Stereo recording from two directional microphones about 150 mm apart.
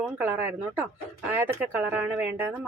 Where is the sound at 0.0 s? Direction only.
15° right (ahead or behind).